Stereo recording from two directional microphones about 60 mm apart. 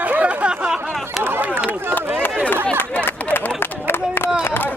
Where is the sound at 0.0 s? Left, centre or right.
Right.